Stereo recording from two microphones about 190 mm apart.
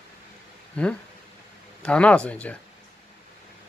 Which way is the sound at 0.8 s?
5° left (ahead or behind).